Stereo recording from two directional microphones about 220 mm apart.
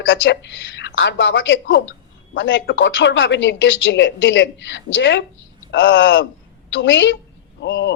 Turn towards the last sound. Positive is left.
turn(degrees=50)  # may be behind; listen again after turning